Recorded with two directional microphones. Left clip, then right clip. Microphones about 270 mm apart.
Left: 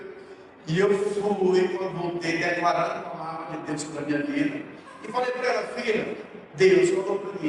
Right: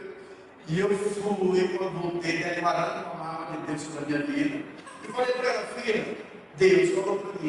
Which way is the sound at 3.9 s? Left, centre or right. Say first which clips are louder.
Left 2 dB; centre.